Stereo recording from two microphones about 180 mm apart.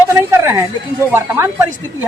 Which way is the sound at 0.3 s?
15° right (ahead or behind).